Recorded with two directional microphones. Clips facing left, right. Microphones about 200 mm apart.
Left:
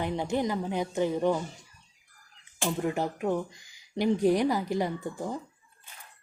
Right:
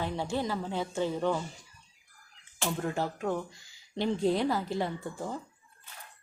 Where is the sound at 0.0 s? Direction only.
20° left (ahead or behind).